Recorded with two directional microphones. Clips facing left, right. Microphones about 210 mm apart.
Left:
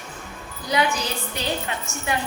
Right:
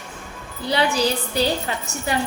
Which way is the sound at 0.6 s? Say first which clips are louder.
Right 4 dB; 30° right (ahead or behind).